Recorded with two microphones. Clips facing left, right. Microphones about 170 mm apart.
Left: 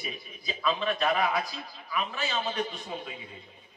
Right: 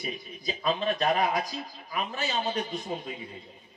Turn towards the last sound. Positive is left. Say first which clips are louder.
# right 3 dB
turn(degrees=-40)  # may be behind; listen again after turning